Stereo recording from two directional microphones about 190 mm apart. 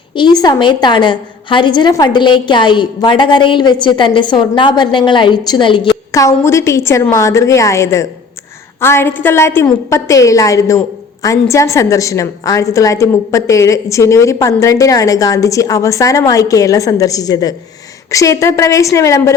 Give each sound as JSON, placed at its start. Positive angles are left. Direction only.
{"t": 0.2, "sound": "a woman's voice", "side_deg": 20}